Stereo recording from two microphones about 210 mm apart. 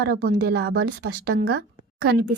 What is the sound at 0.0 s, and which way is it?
Speech, 50° right (ahead or behind).